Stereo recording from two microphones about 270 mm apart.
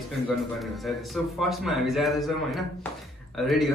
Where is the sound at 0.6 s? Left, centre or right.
Centre.